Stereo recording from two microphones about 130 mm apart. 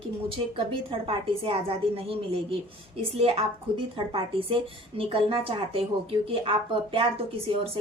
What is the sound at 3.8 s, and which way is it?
A woman's voice, 45° right (ahead or behind).